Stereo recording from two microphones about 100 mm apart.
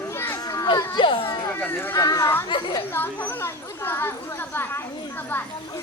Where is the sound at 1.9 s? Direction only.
35° left (ahead or behind).